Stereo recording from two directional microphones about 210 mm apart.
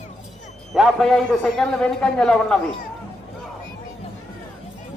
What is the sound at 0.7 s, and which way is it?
A man's voice, centre (ahead or behind).